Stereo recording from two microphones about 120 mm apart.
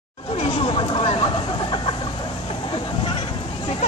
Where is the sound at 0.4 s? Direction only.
50° left (ahead or behind).